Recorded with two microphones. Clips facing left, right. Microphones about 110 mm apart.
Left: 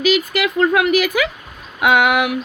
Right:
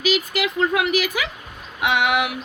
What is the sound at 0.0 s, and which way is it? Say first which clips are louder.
A woman's voice: left 5 dB; 50° left (ahead or behind).